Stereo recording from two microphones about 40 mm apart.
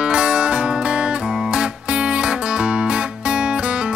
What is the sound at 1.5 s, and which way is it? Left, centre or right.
Music, right.